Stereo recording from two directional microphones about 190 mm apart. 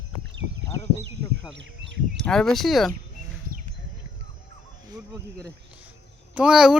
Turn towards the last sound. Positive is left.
turn(degrees=-5)  # may be behind; listen again after turning